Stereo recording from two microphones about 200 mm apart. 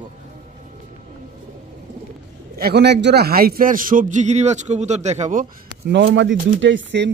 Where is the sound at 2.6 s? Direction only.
55° right (ahead or behind); by 5.5 s 40° right (ahead or behind).